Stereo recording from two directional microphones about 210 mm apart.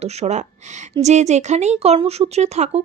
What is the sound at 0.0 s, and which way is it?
Speech, 30° right (ahead or behind).